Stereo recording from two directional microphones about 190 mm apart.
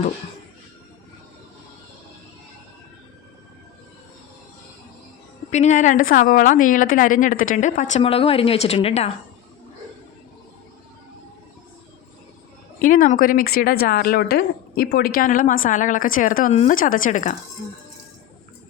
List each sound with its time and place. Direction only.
5.5 s a woman's voice: 35° left (ahead or behind)
12.8 s speech: 45° left (ahead or behind)